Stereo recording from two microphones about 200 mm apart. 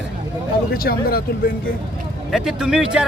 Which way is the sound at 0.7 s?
50° left (ahead or behind).